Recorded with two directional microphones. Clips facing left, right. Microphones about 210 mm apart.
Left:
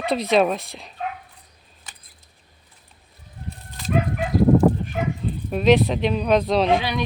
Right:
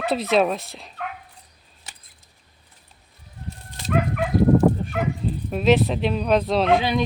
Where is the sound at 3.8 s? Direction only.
65° right (ahead or behind).